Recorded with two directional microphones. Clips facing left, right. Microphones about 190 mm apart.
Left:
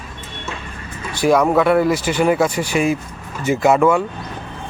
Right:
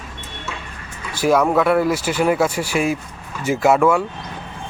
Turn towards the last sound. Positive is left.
turn(degrees=-5)  # may be behind; listen again after turning